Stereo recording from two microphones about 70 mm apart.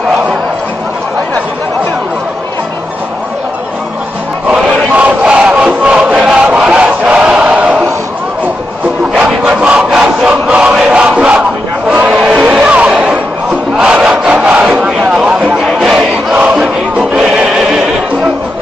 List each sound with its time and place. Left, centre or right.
4.5 s chant: centre
6.7 s battle cry: centre
9.1 s crowd: centre
10.9 s a sound: centre
15.8 s battle cry: centre
16.3 s crowd: centre
17.1 s neigh: centre